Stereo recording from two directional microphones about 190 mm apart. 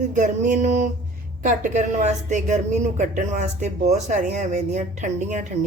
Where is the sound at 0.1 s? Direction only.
40° right (ahead or behind).